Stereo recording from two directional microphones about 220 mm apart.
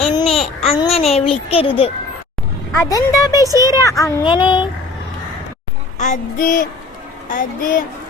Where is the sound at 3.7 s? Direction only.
15° left (ahead or behind).